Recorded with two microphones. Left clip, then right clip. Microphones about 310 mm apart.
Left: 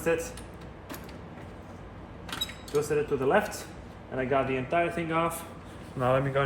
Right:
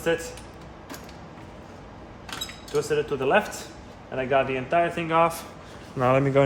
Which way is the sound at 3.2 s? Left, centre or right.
Centre.